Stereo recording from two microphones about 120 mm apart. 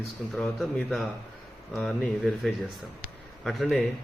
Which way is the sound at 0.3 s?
Centre (ahead or behind).